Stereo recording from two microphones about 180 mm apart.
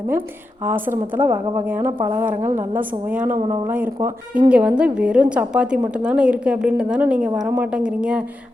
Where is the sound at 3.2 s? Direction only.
40° right (ahead or behind).